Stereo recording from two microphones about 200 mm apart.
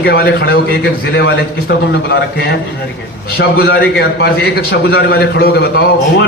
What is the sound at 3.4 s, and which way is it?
A man's voice, 50° left (ahead or behind).